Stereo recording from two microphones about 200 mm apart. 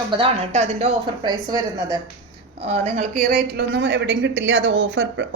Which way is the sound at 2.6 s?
35° right (ahead or behind).